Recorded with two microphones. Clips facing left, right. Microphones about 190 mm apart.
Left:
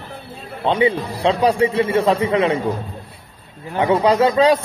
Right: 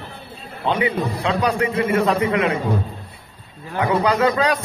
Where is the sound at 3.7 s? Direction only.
25° left (ahead or behind).